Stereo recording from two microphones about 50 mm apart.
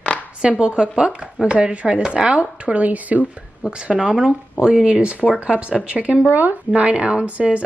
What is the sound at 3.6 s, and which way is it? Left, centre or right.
A woman's voice, centre.